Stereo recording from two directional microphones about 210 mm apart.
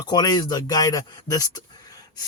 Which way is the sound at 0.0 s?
20° left (ahead or behind).